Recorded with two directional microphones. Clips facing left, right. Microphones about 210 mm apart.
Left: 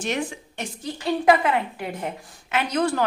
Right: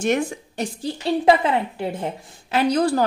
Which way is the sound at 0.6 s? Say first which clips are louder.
Right 6 dB; 30° right (ahead or behind).